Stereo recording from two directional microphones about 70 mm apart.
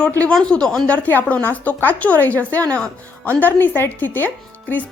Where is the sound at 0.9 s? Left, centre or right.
Left.